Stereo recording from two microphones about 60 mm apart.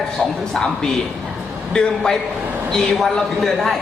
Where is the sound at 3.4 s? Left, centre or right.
Centre.